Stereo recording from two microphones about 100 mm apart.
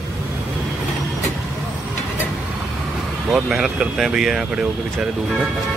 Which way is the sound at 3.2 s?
5° right (ahead or behind).